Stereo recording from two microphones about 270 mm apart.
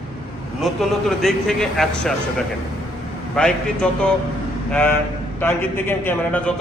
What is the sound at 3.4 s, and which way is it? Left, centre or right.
A man's voice, centre.